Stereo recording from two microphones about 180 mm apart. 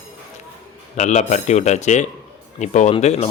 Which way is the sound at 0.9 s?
40° left (ahead or behind).